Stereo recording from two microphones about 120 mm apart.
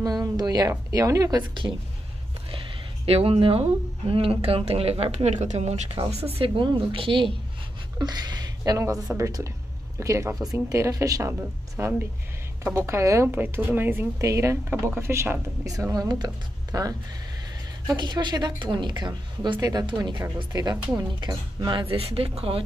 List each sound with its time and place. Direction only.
0.0 s speech: 30° right (ahead or behind)
3.1 s a woman's voice: 55° right (ahead or behind); by 5.8 s 70° right (ahead or behind)
5.9 s a woman's voice: 55° right (ahead or behind); by 20.7 s 35° right (ahead or behind)
20.7 s speech: 20° right (ahead or behind)
21.2 s a woman's voice: 35° right (ahead or behind)
21.8 s a woman's voice: 55° right (ahead or behind)